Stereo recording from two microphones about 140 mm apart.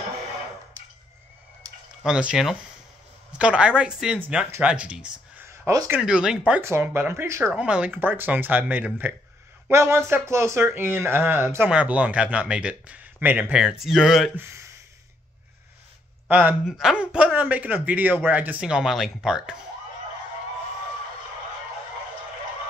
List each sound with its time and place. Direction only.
2.0 s speech: 5° right (ahead or behind)
7.5 s speech: 10° right (ahead or behind)
14.3 s speech: 20° right (ahead or behind)
16.3 s speech: 10° right (ahead or behind)